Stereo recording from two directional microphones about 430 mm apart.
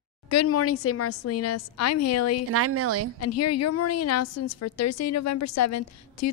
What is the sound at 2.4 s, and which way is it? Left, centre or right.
Speech, right.